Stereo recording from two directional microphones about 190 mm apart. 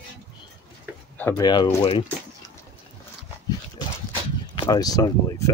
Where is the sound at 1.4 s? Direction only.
20° left (ahead or behind).